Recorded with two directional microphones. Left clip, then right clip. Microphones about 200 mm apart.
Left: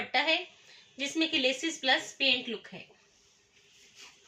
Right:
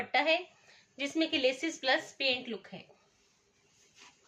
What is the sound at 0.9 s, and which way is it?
Speech, 20° right (ahead or behind).